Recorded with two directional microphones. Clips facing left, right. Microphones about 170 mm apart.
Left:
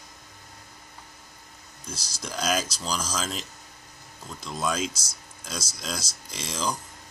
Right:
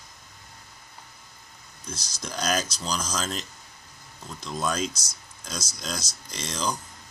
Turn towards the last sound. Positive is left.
turn(degrees=5)  # may be behind; listen again after turning